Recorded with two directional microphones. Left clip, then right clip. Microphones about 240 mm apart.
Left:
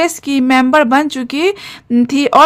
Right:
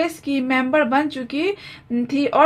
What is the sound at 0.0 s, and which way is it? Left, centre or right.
A woman's voice, left.